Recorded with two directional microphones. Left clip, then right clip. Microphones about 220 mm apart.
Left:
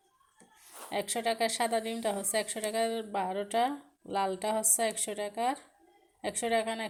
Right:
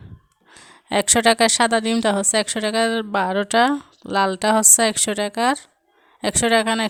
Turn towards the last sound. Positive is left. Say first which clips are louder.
# right 13 dB
turn(degrees=-50)  # may be behind; listen again after turning